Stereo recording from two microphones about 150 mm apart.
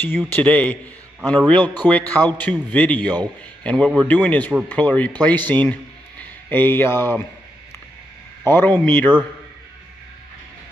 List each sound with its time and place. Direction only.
0.0 s a man's voice: 10° left (ahead or behind)
1.8 s a man's voice: 10° left (ahead or behind)
8.5 s a man's voice: 10° left (ahead or behind)